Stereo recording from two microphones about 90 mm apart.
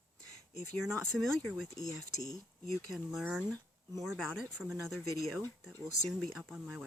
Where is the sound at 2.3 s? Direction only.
40° left (ahead or behind).